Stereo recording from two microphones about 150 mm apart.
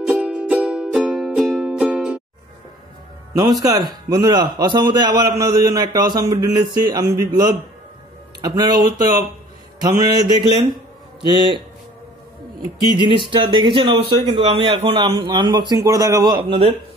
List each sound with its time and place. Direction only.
0.0 s music: 5° right (ahead or behind)
3.3 s a man's voice: 25° right (ahead or behind)
12.9 s a man's voice: 35° right (ahead or behind)